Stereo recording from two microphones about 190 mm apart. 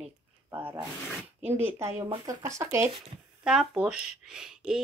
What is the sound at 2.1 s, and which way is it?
Speech, 20° right (ahead or behind).